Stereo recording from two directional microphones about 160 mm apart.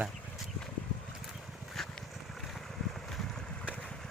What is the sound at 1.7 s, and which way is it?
Boat, centre (ahead or behind).